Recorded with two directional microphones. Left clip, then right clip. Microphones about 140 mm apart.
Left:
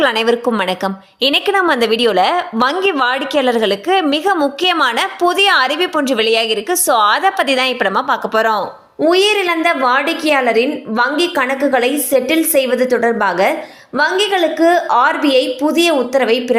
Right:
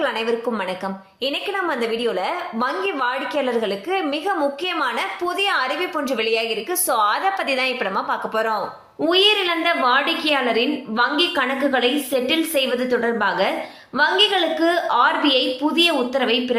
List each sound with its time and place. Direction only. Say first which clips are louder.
0.0 s a woman's voice: left 8 dB; 90° left
2.3 s a woman's voice: left 8 dB; 90° left; by 8.6 s 70° left (ahead or behind)
9.0 s a woman's voice: left 4 dB; 50° left (ahead or behind)